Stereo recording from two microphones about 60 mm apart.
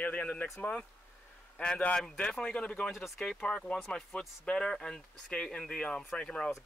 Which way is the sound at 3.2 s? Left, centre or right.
Centre.